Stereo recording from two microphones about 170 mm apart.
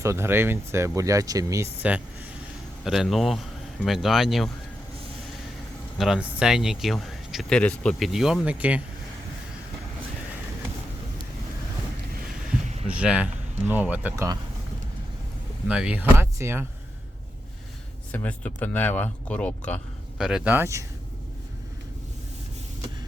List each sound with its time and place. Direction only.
0.0 s speech: 15° right (ahead or behind)
2.8 s speech: centre (ahead or behind)
6.0 s speech: 5° right (ahead or behind)
12.9 s speech: 5° right (ahead or behind)
15.7 s speech: 5° right (ahead or behind)
18.1 s speech: 10° left (ahead or behind)
20.1 s speech: 5° right (ahead or behind)